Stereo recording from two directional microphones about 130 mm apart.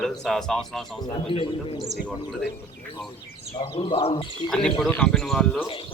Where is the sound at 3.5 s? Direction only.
45° left (ahead or behind).